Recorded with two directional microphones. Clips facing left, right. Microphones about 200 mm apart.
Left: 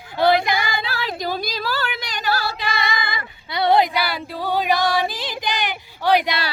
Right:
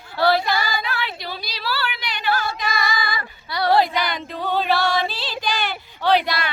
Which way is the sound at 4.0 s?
10° left (ahead or behind).